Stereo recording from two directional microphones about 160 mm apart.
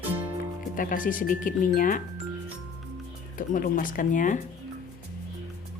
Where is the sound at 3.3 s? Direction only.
55° left (ahead or behind).